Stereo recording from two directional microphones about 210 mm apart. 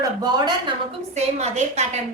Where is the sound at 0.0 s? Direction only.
20° right (ahead or behind).